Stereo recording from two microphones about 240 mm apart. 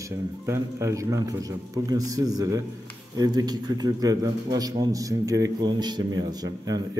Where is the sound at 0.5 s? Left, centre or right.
Centre.